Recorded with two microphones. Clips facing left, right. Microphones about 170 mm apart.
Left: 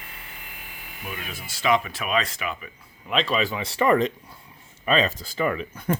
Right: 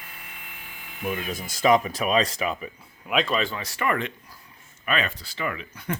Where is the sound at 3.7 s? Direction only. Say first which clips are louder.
Left 8 dB; 35° left (ahead or behind).